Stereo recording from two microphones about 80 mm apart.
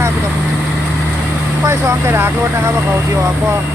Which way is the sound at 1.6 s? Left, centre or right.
Right.